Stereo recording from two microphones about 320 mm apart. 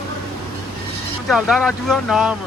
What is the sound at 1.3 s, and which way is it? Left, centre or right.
Speech, centre.